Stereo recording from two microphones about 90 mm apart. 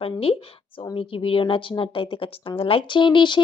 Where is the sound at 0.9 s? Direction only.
80° left.